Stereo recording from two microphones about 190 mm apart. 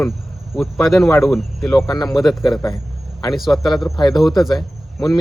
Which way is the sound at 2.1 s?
Centre (ahead or behind).